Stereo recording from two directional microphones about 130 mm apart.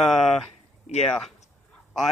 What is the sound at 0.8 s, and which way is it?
Speech, 60° left (ahead or behind).